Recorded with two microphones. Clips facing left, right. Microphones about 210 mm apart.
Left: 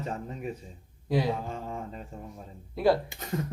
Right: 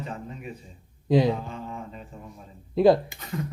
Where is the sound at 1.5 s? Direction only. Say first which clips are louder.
Even; 40° left (ahead or behind).